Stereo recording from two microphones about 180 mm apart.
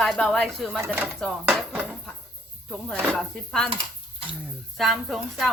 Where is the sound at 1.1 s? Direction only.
Centre (ahead or behind).